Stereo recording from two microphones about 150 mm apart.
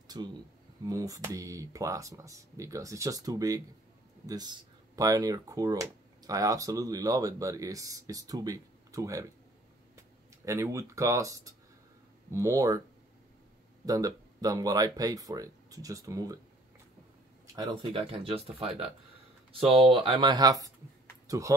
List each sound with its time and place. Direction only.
0.2 s speech: 30° right (ahead or behind)
10.4 s speech: 20° right (ahead or behind)
13.8 s speech: 25° right (ahead or behind)
17.9 s speech: 40° right (ahead or behind); by 21.5 s 20° right (ahead or behind)